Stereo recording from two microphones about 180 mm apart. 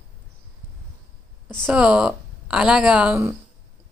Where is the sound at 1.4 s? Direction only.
5° left (ahead or behind).